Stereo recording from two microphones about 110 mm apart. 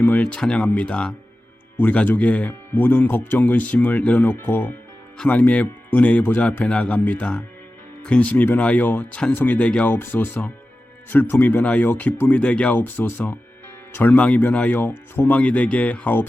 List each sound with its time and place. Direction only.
0.0 s speech: 15° left (ahead or behind)